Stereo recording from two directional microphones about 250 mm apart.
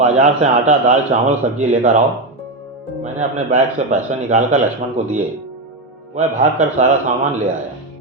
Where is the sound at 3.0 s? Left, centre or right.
Right.